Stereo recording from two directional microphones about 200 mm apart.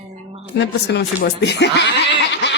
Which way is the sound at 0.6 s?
60° left (ahead or behind).